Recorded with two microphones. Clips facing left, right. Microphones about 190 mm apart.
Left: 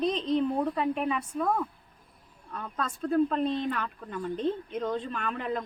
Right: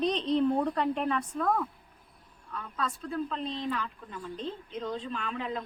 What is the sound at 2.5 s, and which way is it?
Speech, 45° left (ahead or behind).